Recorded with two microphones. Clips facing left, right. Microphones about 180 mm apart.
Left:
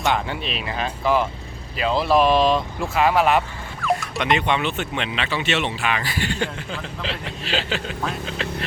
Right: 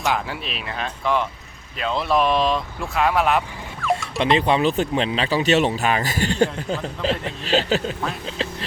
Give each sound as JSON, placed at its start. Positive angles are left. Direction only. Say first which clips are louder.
{"t": 0.0, "sound": "speech", "louder": "left 1 dB", "side_deg": 0}
{"t": 4.2, "sound": "speech", "louder": "right 5 dB", "side_deg": -30}